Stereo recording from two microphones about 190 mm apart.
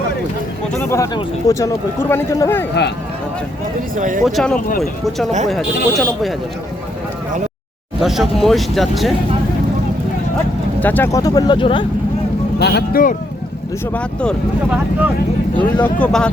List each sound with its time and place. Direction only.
0.8 s speech: 15° left (ahead or behind)
3.9 s speech: 45° right (ahead or behind)
4.3 s speech: centre (ahead or behind)
8.0 s speech: centre (ahead or behind)
10.8 s speech: 10° left (ahead or behind); by 11.9 s 25° left (ahead or behind)
12.5 s speech: 60° left (ahead or behind)
13.9 s speech: 5° left (ahead or behind)
15.5 s speech: 10° left (ahead or behind)